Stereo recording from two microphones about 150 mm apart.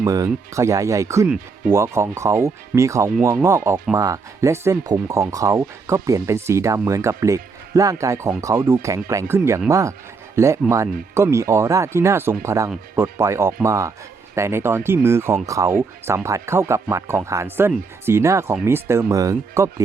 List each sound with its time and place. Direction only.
0.0 s speech: 20° right (ahead or behind)